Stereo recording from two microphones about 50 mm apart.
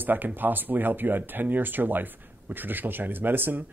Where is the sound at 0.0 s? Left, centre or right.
Right.